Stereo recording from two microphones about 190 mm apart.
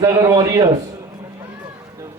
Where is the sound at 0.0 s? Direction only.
15° right (ahead or behind).